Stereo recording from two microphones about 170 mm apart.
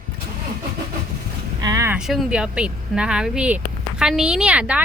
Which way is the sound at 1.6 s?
20° right (ahead or behind).